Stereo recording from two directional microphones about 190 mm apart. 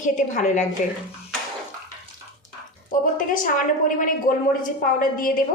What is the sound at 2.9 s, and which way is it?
A woman's voice, 45° left (ahead or behind).